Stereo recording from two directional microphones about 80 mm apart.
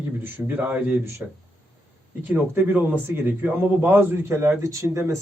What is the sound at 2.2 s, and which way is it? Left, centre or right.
A man's voice, right.